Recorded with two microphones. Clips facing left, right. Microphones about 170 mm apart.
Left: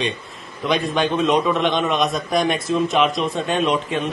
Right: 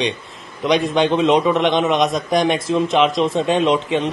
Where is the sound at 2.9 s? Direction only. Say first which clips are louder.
Right 3 dB; 25° right (ahead or behind).